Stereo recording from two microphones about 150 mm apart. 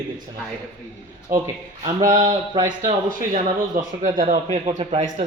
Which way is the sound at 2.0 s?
60° right (ahead or behind).